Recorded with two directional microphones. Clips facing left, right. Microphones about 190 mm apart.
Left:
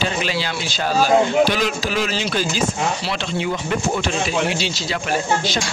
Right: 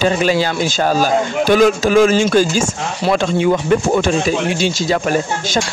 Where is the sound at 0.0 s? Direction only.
45° right (ahead or behind).